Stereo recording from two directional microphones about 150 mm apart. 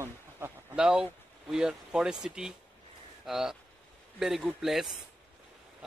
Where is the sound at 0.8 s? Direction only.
5° right (ahead or behind).